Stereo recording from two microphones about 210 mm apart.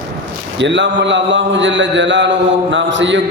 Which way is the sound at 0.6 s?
60° right (ahead or behind).